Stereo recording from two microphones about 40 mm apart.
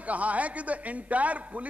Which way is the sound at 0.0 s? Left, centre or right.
Right.